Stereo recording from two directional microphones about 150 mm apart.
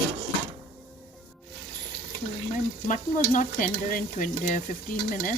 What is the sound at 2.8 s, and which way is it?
Stir, 60° left (ahead or behind).